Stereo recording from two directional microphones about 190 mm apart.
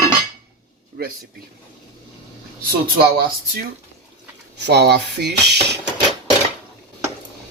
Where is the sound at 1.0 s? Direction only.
55° right (ahead or behind).